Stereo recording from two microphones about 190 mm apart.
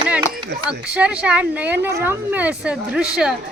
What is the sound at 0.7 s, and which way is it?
Speech, 5° right (ahead or behind).